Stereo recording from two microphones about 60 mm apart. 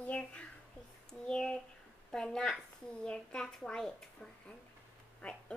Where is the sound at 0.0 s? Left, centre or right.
Left.